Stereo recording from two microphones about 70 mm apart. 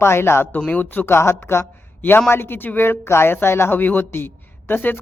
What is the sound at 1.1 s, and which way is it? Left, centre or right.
A man's voice, left.